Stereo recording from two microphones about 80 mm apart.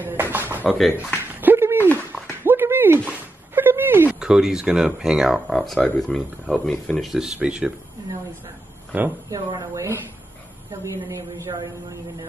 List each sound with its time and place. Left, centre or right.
0.0 s music: right
1.3 s a sound: right
4.1 s speech: centre
7.1 s speech: centre
8.9 s speech: centre
9.3 s speech: right
11.1 s a man's voice: right
11.5 s speech: right